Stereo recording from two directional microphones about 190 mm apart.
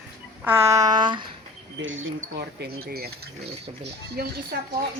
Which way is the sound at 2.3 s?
55° right (ahead or behind).